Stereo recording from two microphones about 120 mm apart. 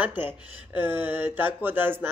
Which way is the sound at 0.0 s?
15° right (ahead or behind).